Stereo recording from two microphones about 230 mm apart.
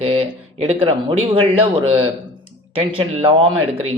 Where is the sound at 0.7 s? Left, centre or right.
Right.